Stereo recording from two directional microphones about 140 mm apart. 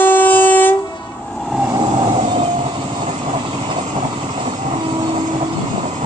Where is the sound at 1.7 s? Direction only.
35° right (ahead or behind).